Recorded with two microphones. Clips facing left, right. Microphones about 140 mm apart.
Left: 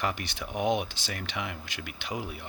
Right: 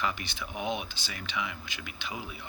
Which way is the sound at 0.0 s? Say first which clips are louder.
Left 1 dB; 65° left (ahead or behind).